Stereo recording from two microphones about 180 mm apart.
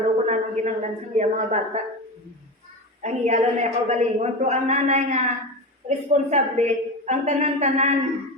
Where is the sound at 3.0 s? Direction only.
40° right (ahead or behind).